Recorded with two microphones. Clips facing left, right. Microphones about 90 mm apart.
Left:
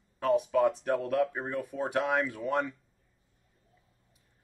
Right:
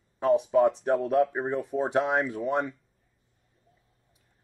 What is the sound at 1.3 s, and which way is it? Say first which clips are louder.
Speech: right 6 dB; 20° right (ahead or behind).